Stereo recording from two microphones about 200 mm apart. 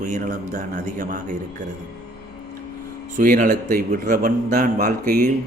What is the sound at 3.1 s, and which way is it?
A man's voice, 40° right (ahead or behind).